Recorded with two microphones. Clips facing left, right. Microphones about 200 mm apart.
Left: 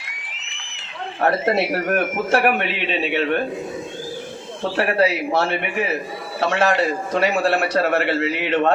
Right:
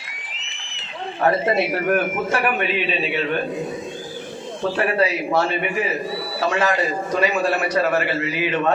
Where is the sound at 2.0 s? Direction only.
70° left (ahead or behind).